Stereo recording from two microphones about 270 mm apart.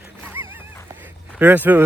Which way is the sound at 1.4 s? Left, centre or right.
Centre.